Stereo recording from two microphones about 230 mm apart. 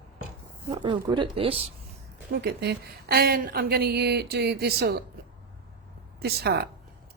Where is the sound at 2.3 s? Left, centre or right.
Right.